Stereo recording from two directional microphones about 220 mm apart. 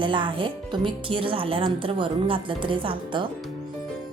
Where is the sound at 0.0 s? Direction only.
20° right (ahead or behind).